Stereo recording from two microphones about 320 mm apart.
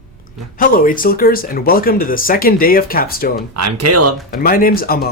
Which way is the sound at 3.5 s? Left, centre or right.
Right.